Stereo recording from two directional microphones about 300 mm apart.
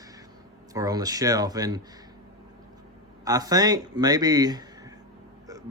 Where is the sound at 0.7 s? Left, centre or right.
Centre.